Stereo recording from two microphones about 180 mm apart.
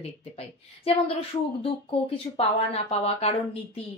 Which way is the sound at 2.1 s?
35° left (ahead or behind).